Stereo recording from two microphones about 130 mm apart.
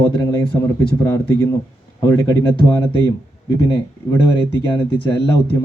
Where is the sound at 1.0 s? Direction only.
20° left (ahead or behind).